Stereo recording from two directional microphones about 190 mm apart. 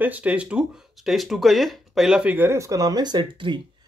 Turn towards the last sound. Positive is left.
turn(degrees=-25)  # may be behind; listen again after turning